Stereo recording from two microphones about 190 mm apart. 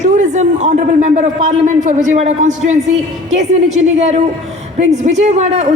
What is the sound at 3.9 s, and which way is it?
A man's voice, 35° right (ahead or behind).